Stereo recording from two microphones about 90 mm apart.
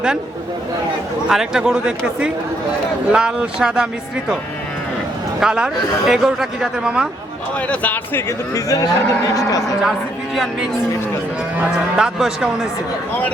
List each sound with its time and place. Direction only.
1.3 s a man's voice: 5° right (ahead or behind)
5.4 s a man's voice: 5° right (ahead or behind)
7.7 s speech: 20° left (ahead or behind)
8.5 s speech: 40° left (ahead or behind)
10.3 s a man's voice: 5° right (ahead or behind)